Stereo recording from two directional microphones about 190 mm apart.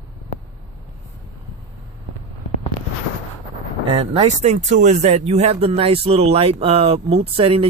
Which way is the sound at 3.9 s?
30° right (ahead or behind).